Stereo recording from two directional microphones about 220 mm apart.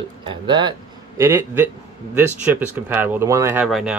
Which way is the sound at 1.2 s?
10° right (ahead or behind).